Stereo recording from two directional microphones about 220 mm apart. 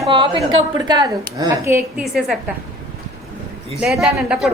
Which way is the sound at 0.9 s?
20° right (ahead or behind).